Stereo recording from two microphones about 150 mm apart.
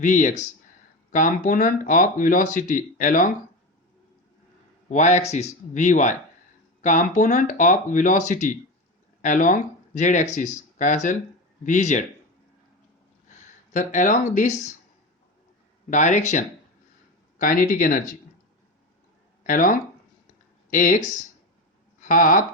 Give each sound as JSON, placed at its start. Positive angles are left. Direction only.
{"t": 0.0, "sound": "speech", "side_deg": 60}
{"t": 4.9, "sound": "speech", "side_deg": 55}
{"t": 13.2, "sound": "speech", "side_deg": 55}
{"t": 15.9, "sound": "speech", "side_deg": 55}
{"t": 17.3, "sound": "speech", "side_deg": 65}
{"t": 19.5, "sound": "speech", "side_deg": 65}